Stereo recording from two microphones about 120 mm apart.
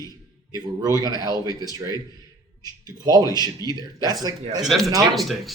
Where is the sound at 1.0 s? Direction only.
35° right (ahead or behind).